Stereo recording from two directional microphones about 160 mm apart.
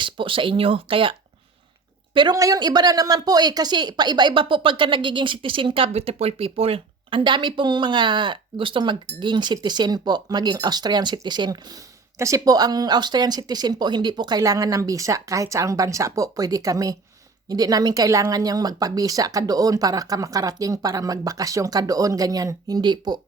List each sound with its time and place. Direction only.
0.0 s speech: 30° right (ahead or behind)
2.1 s a woman's voice: 25° right (ahead or behind)